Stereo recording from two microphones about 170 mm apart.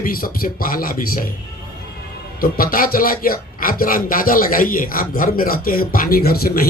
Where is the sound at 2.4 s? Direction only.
60° left (ahead or behind).